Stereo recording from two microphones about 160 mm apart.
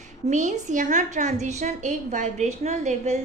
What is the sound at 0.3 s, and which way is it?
A woman's voice, 50° right (ahead or behind).